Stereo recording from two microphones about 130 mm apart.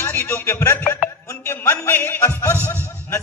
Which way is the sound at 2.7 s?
20° left (ahead or behind).